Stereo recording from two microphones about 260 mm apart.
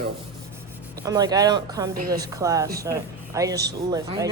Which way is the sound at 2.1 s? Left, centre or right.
Centre.